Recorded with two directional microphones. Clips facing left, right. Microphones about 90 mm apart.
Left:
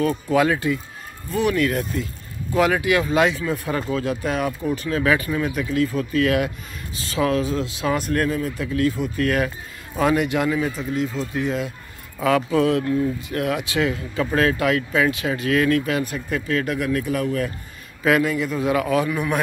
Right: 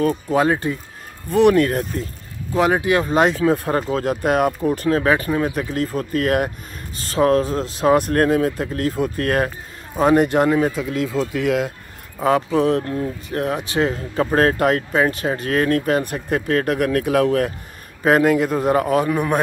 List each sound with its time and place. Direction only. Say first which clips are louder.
0.3 s speech: left 1 dB; 30° right (ahead or behind)
1.3 s speech: right 6 dB; 50° right (ahead or behind)
2.5 s speech: right 2 dB; 30° right (ahead or behind)
3.3 s speech: right 6 dB; 60° right (ahead or behind)
5.0 s speech: right 2 dB; 35° right (ahead or behind)
8.3 s speech: right 6 dB; 65° right (ahead or behind)
8.6 s speech: even; 40° right (ahead or behind)
10.8 s speech: right 3 dB; 90° right
12.2 s speech: right 2 dB; 30° right (ahead or behind)
12.8 s speech: left 3 dB; 40° right (ahead or behind); by 17.5 s 70° right (ahead or behind)
18.2 s speech: right 5 dB; 55° right (ahead or behind); by 19.4 s 40° right (ahead or behind)